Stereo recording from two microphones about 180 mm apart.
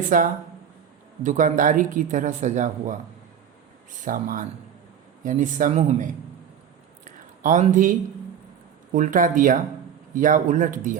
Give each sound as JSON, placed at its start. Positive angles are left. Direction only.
{"t": 0.1, "sound": "speech", "side_deg": -45}
{"t": 3.9, "sound": "speech", "side_deg": -45}
{"t": 7.0, "sound": "a sound", "side_deg": -45}
{"t": 8.9, "sound": "speech", "side_deg": -45}